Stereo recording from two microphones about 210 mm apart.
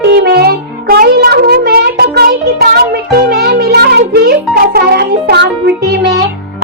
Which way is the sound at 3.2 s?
50° right (ahead or behind).